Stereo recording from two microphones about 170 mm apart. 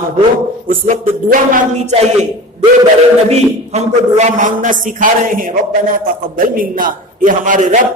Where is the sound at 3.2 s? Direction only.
40° right (ahead or behind).